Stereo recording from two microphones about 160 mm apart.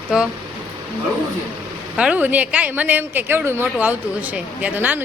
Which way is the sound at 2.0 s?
10° right (ahead or behind).